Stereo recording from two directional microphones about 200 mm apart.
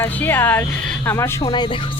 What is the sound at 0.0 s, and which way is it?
Speech, 10° left (ahead or behind).